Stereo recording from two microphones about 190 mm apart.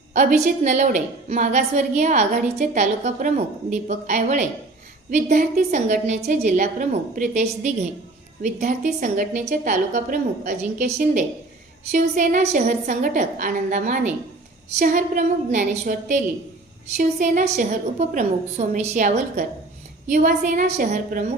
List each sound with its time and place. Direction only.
0.1 s a woman's voice: 40° right (ahead or behind)